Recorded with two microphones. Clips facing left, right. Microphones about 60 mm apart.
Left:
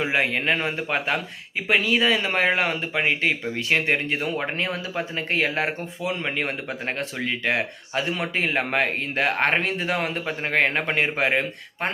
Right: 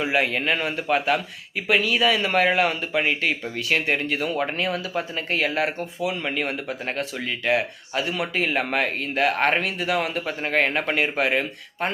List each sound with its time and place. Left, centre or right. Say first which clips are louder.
0.0 s speech: even; left